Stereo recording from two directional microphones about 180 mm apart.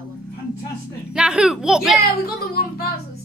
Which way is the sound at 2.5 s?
55° left (ahead or behind).